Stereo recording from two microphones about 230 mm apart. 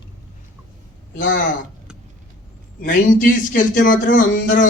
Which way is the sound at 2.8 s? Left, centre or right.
Left.